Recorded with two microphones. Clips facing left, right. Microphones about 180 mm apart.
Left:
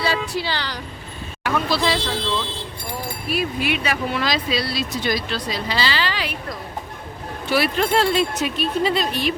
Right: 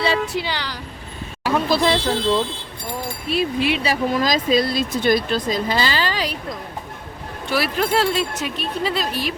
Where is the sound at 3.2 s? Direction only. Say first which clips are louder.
Right 3 dB; 25° right (ahead or behind); by 6.3 s 40° right (ahead or behind).